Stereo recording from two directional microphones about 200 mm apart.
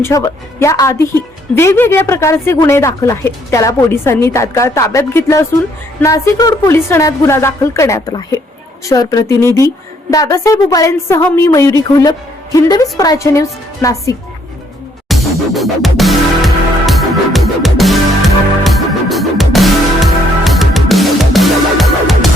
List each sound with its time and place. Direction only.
0.0 s a woman's voice: 15° left (ahead or behind)
15.1 s music: centre (ahead or behind)